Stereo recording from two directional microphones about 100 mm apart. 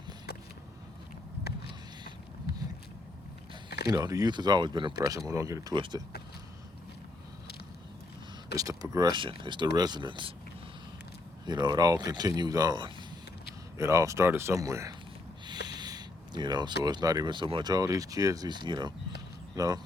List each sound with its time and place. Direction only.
3.9 s speech: 40° right (ahead or behind)
5.0 s speech: 35° right (ahead or behind)
5.7 s speech: 50° right (ahead or behind)
8.5 s speech: 35° right (ahead or behind)
9.1 s speech: 55° right (ahead or behind)
11.4 s speech: 45° right (ahead or behind)
13.7 s speech: 30° right (ahead or behind)
15.4 s speech: 45° right (ahead or behind)
19.5 s speech: 35° right (ahead or behind)